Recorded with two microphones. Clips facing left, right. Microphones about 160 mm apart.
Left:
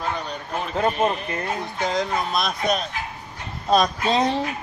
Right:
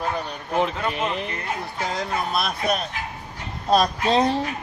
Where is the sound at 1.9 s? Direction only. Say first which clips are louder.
Left 3 dB; 5° right (ahead or behind).